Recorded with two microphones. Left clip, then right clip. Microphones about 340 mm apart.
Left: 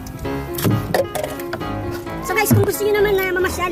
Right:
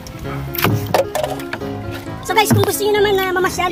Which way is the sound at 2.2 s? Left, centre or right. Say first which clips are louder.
Right 4 dB; centre.